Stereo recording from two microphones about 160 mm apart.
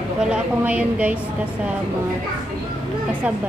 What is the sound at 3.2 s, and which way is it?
Speech, 10° right (ahead or behind).